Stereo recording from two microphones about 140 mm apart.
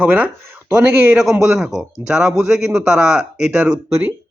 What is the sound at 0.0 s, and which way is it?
Speech, 15° right (ahead or behind).